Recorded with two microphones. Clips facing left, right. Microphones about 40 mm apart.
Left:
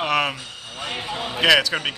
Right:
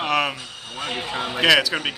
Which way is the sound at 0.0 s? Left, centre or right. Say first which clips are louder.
Even; centre.